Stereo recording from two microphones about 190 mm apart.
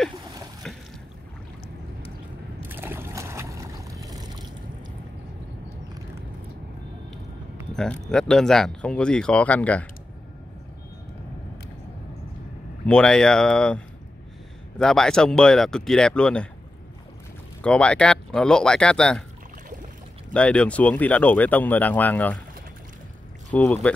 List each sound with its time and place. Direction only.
2.6 s boat: 10° right (ahead or behind)
7.7 s speech: 5° left (ahead or behind)
12.8 s speech: 5° left (ahead or behind)
17.6 s speech: 5° left (ahead or behind)
20.3 s speech: 5° left (ahead or behind)
23.5 s speech: 5° left (ahead or behind)